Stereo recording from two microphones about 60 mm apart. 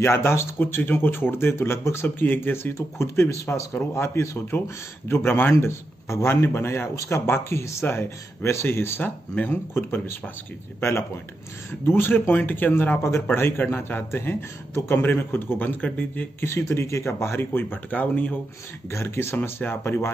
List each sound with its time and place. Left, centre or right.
0.0 s speech: left
3.7 s a man's voice: left
8.5 s a man's voice: left
9.3 s speech: left
9.8 s a man's voice: left
13.0 s speech: left
16.4 s speech: left
18.9 s speech: left